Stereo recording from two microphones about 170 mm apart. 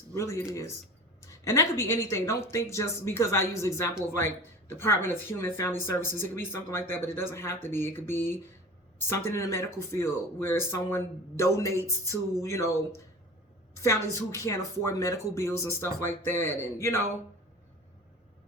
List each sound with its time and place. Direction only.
0.1 s a woman's voice: 15° left (ahead or behind)
14.3 s speech: 20° left (ahead or behind)